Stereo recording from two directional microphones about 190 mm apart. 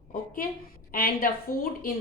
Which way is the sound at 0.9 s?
50° left (ahead or behind).